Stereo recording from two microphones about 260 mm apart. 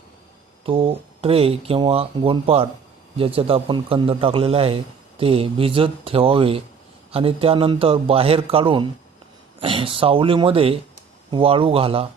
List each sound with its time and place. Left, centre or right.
0.6 s a man's voice: right